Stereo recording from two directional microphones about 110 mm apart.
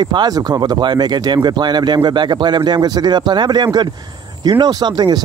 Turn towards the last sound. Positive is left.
turn(degrees=-40)  # may be behind; listen again after turning